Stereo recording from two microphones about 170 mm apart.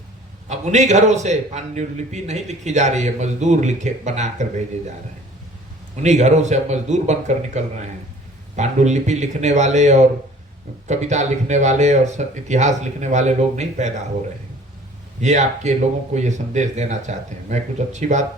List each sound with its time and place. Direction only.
0.4 s a man's voice: 45° right (ahead or behind)
6.0 s a man's voice: 45° right (ahead or behind)
15.2 s a man's voice: 45° right (ahead or behind)